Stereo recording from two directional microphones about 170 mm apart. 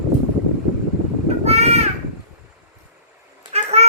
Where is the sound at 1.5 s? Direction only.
40° right (ahead or behind).